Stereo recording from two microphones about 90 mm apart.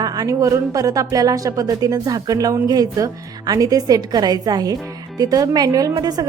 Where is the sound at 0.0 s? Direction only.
45° right (ahead or behind).